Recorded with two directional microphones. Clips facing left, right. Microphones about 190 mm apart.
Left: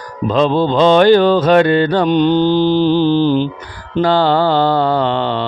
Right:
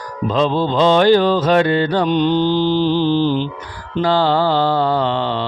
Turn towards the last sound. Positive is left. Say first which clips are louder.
# left 2 dB
turn(degrees=60)  # may be behind; listen again after turning